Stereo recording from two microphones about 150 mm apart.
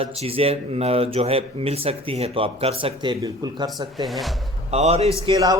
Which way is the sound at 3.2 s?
25° right (ahead or behind).